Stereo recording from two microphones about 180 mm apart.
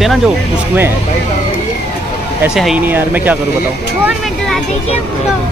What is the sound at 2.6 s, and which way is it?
Speech, 5° right (ahead or behind).